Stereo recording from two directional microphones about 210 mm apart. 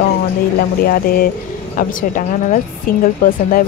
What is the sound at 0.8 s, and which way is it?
Speech, 45° left (ahead or behind).